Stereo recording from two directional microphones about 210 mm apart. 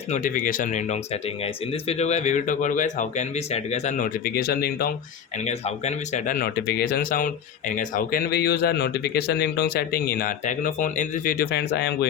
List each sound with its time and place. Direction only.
0.1 s speech: 40° left (ahead or behind)
5.5 s speech: 30° left (ahead or behind); by 11.9 s 50° left (ahead or behind)